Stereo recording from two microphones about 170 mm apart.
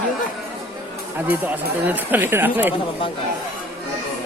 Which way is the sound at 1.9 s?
10° right (ahead or behind).